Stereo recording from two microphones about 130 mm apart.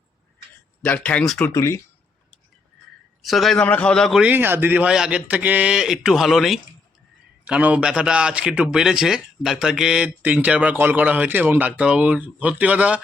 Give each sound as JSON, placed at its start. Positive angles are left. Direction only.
{"t": 0.8, "sound": "speech", "side_deg": 10}
{"t": 1.5, "sound": "speech", "side_deg": 25}
{"t": 3.2, "sound": "a man's voice", "side_deg": 0}
{"t": 4.2, "sound": "a man's voice", "side_deg": -15}